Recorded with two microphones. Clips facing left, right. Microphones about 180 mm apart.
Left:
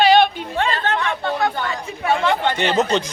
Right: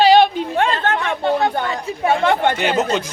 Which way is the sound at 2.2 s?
50° right (ahead or behind).